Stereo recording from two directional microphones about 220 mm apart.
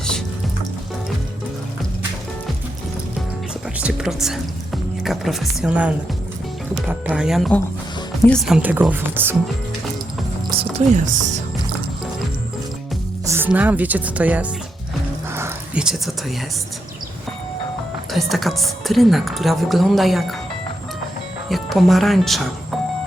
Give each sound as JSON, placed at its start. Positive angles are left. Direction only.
{"t": 3.8, "sound": "a woman's voice", "side_deg": -5}
{"t": 10.6, "sound": "music", "side_deg": -30}
{"t": 13.2, "sound": "speech", "side_deg": -10}
{"t": 15.3, "sound": "dog", "side_deg": -10}
{"t": 18.1, "sound": "a woman's voice", "side_deg": 0}
{"t": 21.5, "sound": "speech", "side_deg": 0}